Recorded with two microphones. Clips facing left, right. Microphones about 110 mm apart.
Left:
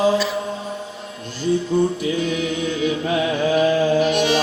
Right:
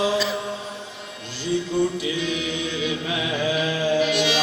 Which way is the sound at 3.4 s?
40° left (ahead or behind).